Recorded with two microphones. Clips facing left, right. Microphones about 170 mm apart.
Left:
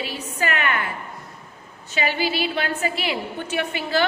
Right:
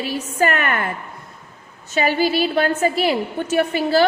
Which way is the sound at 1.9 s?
45° right (ahead or behind).